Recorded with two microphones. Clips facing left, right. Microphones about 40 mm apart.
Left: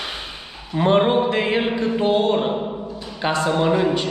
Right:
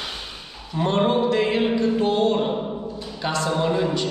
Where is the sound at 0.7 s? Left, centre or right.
Left.